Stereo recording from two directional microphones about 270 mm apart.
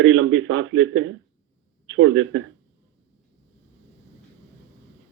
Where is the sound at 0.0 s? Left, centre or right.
Right.